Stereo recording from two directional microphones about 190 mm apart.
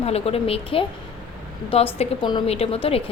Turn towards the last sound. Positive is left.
turn(degrees=30)  # may be behind; listen again after turning